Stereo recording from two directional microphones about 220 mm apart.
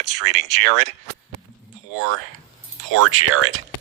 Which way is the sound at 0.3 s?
50° right (ahead or behind).